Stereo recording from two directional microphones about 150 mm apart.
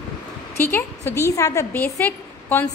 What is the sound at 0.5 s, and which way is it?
A woman's voice, 15° left (ahead or behind).